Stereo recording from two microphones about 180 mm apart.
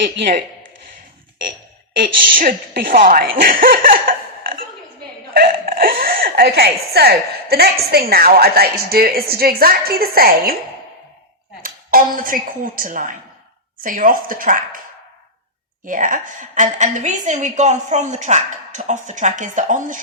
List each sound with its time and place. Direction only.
2.4 s a woman's voice: 50° right (ahead or behind)
3.6 s a sound: 50° right (ahead or behind)
8.1 s a woman's voice: 60° right (ahead or behind)
11.6 s a woman's voice: 50° right (ahead or behind)
15.9 s a woman's voice: 45° right (ahead or behind)